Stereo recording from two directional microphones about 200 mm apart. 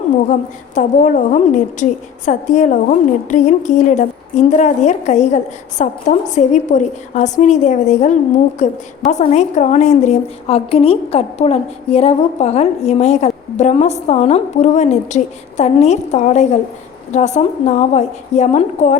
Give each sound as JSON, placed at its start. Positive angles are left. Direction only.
{"t": 0.3, "sound": "a woman's voice", "side_deg": 40}